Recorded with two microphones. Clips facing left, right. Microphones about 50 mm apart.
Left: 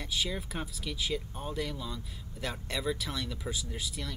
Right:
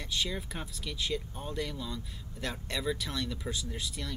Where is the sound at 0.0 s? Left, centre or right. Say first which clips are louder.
Even; centre.